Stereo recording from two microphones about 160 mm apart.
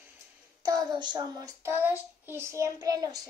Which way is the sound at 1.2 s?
20° right (ahead or behind).